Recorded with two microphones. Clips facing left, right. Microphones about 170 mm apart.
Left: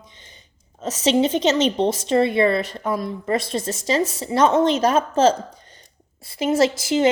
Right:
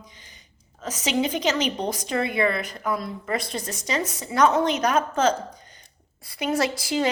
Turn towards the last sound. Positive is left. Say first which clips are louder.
# left 6 dB
turn(degrees=25)  # may be behind; listen again after turning